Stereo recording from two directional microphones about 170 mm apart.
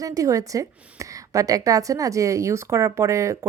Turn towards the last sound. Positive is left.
turn(degrees=-15)  # may be behind; listen again after turning